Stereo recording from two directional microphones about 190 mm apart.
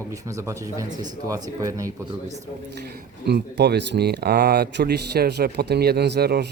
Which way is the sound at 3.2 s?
60° right (ahead or behind).